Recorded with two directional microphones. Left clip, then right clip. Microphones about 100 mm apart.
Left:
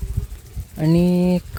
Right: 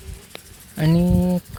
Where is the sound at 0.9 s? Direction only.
40° left (ahead or behind).